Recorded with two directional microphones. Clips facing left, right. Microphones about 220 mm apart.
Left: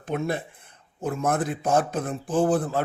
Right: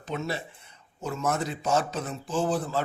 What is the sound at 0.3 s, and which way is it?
Speech, 55° left (ahead or behind).